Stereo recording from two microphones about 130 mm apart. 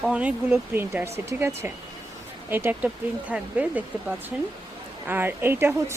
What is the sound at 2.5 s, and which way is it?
Speech, 15° right (ahead or behind).